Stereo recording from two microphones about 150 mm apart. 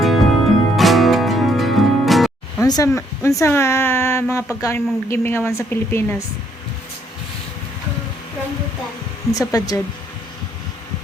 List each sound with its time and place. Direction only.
0.0 s music: centre (ahead or behind)
2.6 s speech: 25° left (ahead or behind)
9.3 s speech: 25° left (ahead or behind)